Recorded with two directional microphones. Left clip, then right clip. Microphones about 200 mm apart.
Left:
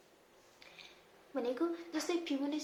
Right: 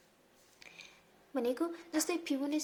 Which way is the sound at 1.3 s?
40° right (ahead or behind).